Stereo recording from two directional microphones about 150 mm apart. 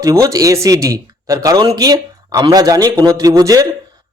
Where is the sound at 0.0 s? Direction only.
20° right (ahead or behind).